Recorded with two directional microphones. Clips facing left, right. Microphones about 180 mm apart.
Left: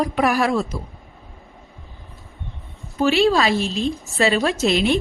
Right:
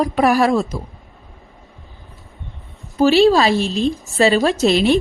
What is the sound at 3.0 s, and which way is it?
Speech, 35° right (ahead or behind).